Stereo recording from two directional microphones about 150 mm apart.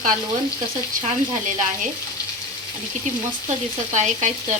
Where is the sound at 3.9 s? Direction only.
50° right (ahead or behind).